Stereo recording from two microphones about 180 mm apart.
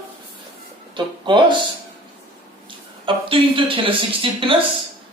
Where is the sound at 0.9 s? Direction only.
25° right (ahead or behind).